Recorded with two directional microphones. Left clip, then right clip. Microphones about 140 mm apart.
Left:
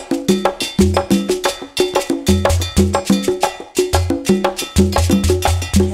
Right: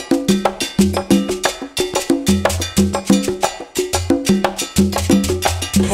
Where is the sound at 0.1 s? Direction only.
Centre (ahead or behind).